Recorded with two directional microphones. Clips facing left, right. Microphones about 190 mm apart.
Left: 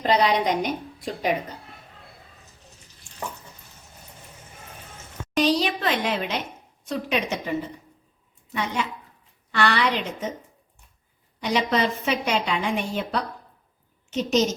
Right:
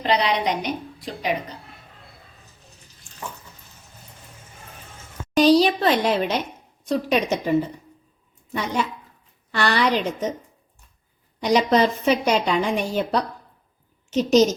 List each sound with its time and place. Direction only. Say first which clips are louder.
0.0 s a woman's voice: left 1 dB; 45° left (ahead or behind)
5.4 s a woman's voice: right 6 dB; 35° right (ahead or behind)
9.5 s a woman's voice: right 2 dB; 40° right (ahead or behind)
11.4 s a woman's voice: right 5 dB; 40° right (ahead or behind)